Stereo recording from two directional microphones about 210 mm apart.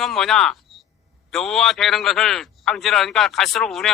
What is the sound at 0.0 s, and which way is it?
Speech, centre (ahead or behind).